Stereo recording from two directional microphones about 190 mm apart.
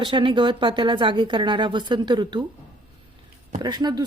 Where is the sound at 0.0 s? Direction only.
25° right (ahead or behind).